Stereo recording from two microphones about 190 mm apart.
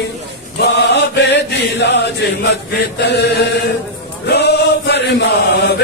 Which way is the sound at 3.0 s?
60° left (ahead or behind).